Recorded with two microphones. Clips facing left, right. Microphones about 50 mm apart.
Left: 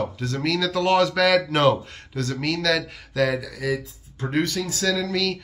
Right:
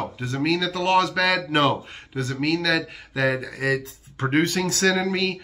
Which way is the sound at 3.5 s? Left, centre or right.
Right.